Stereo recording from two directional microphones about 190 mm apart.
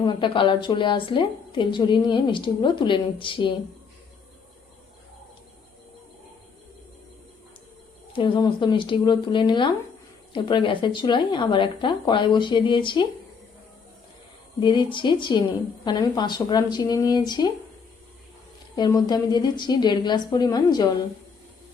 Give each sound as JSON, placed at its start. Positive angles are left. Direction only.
{"t": 0.0, "sound": "a woman's voice", "side_deg": 25}
{"t": 8.1, "sound": "a woman's voice", "side_deg": 25}
{"t": 14.6, "sound": "a woman's voice", "side_deg": 25}
{"t": 18.8, "sound": "a woman's voice", "side_deg": 20}